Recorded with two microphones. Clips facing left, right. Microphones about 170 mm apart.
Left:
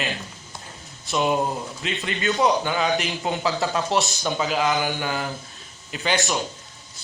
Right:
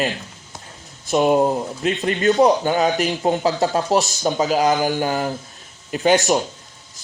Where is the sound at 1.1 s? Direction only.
40° right (ahead or behind).